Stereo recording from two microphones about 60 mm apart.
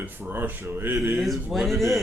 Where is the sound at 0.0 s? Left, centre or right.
Right.